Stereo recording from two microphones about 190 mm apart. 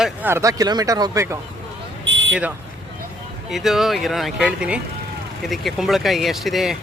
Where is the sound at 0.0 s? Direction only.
10° right (ahead or behind).